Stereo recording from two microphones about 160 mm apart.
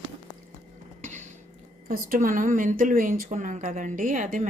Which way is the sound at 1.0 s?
50° right (ahead or behind).